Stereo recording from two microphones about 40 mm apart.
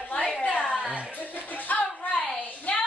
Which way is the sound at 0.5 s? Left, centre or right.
Left.